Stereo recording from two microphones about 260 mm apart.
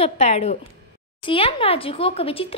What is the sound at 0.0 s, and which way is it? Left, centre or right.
A woman's voice, left.